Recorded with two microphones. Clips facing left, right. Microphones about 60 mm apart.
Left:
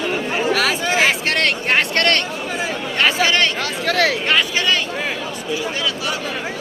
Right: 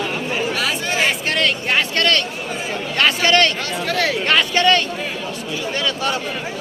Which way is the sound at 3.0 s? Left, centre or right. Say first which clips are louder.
Right 1 dB; centre.